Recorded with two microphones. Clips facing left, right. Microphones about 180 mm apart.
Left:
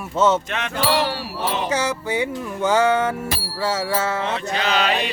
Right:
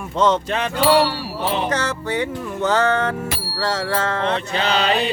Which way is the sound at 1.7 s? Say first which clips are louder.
Even; 10° left (ahead or behind).